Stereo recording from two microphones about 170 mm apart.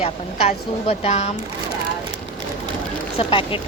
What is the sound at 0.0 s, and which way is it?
Speech, 35° left (ahead or behind).